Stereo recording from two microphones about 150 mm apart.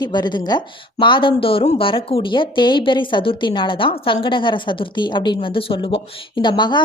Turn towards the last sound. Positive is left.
turn(degrees=30)  # may be behind; listen again after turning